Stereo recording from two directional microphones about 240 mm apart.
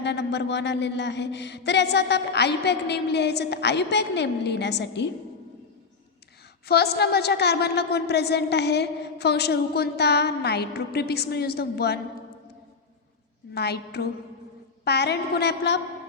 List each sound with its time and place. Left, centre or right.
0.0 s a woman's voice: left
6.7 s a woman's voice: left
13.5 s a woman's voice: left